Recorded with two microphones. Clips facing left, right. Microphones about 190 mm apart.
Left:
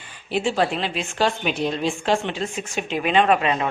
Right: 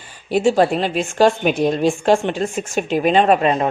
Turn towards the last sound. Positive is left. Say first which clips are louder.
# right 4 dB
turn(degrees=-40)  # may be behind; listen again after turning